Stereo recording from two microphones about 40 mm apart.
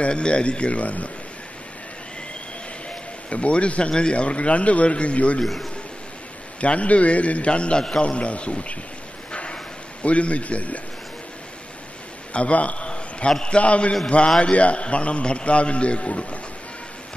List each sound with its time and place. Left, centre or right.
0.0 s a man's voice: left
3.3 s a man's voice: left
5.4 s a man's voice: centre
6.6 s a man's voice: left
9.3 s dog: left
10.0 s a man's voice: left
12.4 s a man's voice: left